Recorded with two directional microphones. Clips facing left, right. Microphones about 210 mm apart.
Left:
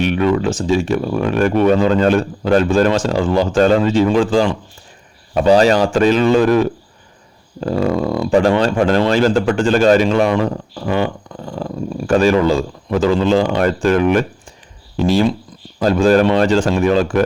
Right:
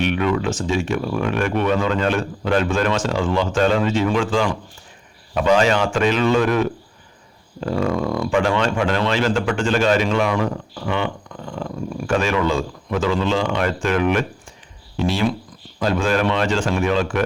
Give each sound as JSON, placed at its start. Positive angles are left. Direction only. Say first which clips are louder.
{"t": 0.0, "sound": "speech", "louder": "left 4 dB", "side_deg": 35}
{"t": 11.3, "sound": "a sound", "louder": "left 4 dB", "side_deg": 35}
{"t": 11.9, "sound": "speech", "louder": "left 7 dB", "side_deg": 35}